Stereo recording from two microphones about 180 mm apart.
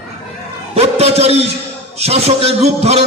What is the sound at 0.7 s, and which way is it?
A man's voice, 35° right (ahead or behind).